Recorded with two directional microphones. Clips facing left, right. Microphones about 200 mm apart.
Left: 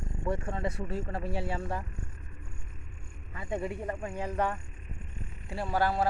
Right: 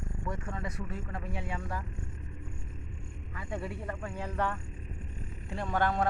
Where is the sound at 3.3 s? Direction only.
20° left (ahead or behind).